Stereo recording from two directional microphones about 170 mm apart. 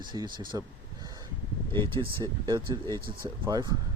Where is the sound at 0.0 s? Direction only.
25° right (ahead or behind).